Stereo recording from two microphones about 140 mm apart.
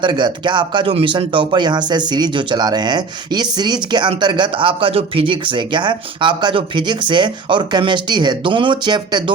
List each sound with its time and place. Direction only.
0.0 s speech: 35° right (ahead or behind)